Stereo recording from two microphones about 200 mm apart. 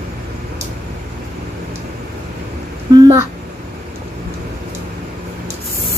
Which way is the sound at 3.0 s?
15° right (ahead or behind).